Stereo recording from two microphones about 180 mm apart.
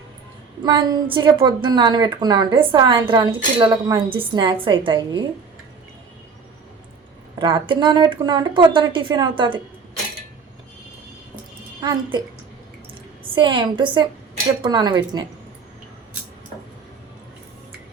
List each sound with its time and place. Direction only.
0.6 s speech: 25° right (ahead or behind)
7.3 s speech: 25° right (ahead or behind)
11.8 s speech: 25° right (ahead or behind)